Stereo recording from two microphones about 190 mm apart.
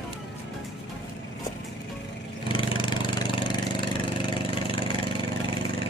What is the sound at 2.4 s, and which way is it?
Engine, 25° left (ahead or behind).